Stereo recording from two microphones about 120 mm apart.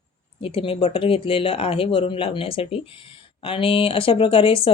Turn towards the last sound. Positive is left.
turn(degrees=50)  # may be behind; listen again after turning